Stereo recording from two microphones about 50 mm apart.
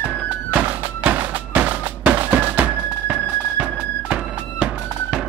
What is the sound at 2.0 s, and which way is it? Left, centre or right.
Music, right.